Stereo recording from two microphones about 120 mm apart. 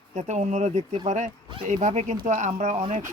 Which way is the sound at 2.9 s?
90° right.